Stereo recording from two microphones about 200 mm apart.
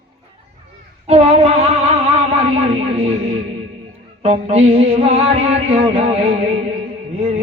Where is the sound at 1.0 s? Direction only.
30° right (ahead or behind).